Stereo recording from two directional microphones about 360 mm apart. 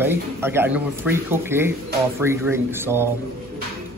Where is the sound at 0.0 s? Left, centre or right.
Centre.